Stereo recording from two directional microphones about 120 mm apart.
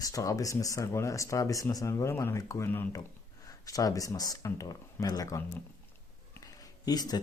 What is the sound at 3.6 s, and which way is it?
Speech, 30° left (ahead or behind).